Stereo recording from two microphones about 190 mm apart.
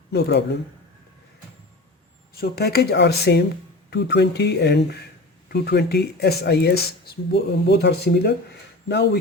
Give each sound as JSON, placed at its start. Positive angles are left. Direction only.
{"t": 0.1, "sound": "speech", "side_deg": 60}
{"t": 2.3, "sound": "speech", "side_deg": 55}